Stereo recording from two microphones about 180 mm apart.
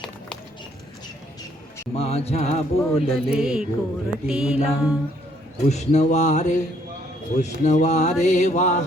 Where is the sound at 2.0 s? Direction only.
35° left (ahead or behind).